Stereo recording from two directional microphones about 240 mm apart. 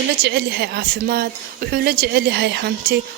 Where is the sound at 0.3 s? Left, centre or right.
Right.